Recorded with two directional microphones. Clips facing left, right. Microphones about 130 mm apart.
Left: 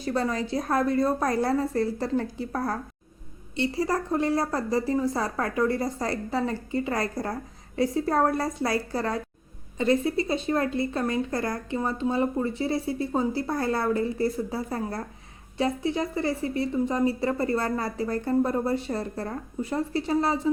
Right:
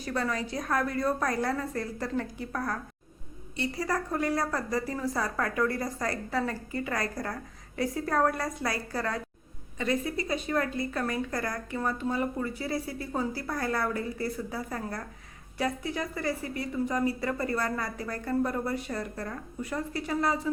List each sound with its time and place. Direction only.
0.0 s a woman's voice: 30° left (ahead or behind)